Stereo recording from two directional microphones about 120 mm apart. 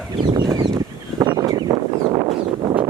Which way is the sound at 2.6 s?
40° right (ahead or behind).